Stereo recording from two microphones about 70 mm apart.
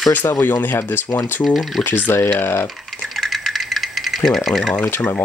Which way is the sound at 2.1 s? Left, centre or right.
Left.